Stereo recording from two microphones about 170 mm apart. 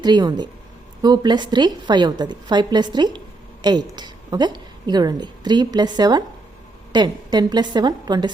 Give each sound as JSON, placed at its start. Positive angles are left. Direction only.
{"t": 0.0, "sound": "a woman's voice", "side_deg": -25}